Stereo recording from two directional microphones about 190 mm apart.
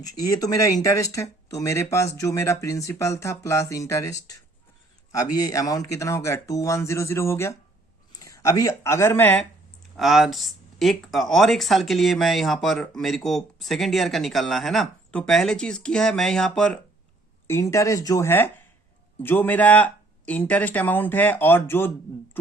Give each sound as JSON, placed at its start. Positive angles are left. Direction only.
{"t": 0.3, "sound": "speech", "side_deg": 20}
{"t": 5.4, "sound": "speech", "side_deg": 20}
{"t": 10.0, "sound": "speech", "side_deg": 0}